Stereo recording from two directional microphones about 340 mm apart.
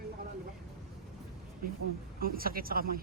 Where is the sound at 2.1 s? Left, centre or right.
Right.